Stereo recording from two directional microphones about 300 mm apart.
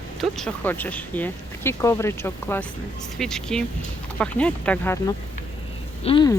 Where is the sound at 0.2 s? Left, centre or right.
Centre.